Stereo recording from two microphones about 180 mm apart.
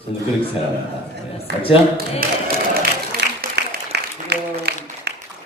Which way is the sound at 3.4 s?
70° right (ahead or behind).